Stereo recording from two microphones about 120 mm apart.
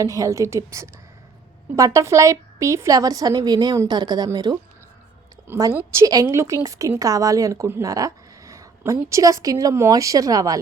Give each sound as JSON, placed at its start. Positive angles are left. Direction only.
{"t": 0.0, "sound": "a woman's voice", "side_deg": -30}
{"t": 5.7, "sound": "a woman's voice", "side_deg": -25}